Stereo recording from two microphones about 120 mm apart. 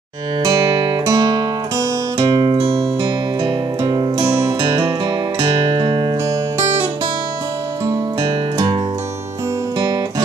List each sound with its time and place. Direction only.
0.4 s music: 30° right (ahead or behind)
2.5 s music: 55° right (ahead or behind)
3.0 s music: 35° right (ahead or behind)
7.8 s music: 30° right (ahead or behind)
8.3 s music: 40° right (ahead or behind)
9.8 s music: 30° right (ahead or behind)